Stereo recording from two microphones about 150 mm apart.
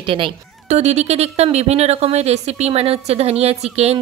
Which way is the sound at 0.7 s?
45° right (ahead or behind).